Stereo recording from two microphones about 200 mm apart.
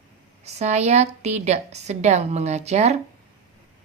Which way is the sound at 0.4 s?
35° right (ahead or behind).